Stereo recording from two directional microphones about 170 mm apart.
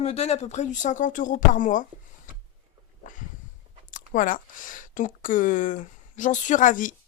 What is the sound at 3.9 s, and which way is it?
Speech, 50° left (ahead or behind).